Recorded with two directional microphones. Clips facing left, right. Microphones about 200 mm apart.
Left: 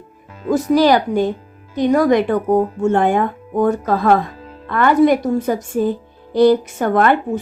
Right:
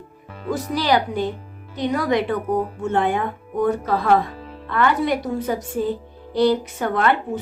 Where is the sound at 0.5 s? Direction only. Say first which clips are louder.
Left 7 dB; 45° left (ahead or behind).